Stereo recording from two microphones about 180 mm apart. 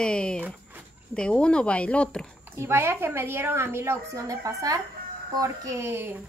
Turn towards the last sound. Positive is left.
turn(degrees=-10)  # may be behind; listen again after turning